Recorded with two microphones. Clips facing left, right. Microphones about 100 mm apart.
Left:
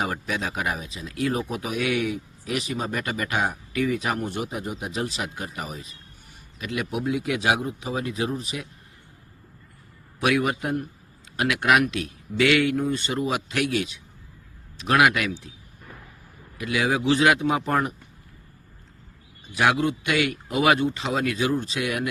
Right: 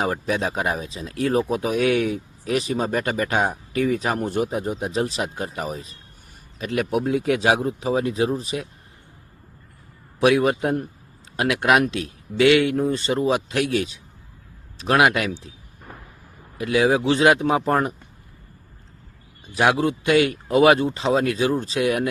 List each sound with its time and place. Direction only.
0.0 s speech: 30° right (ahead or behind)
10.2 s speech: 30° right (ahead or behind)
16.6 s speech: 30° right (ahead or behind)
19.5 s speech: 30° right (ahead or behind)